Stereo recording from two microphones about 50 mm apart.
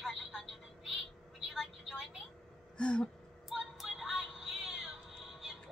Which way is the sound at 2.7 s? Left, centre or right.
Centre.